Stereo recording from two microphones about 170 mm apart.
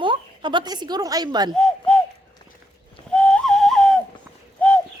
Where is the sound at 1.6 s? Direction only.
5° left (ahead or behind).